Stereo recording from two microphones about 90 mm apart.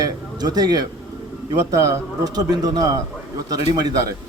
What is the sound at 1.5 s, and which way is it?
A man's voice, 35° right (ahead or behind).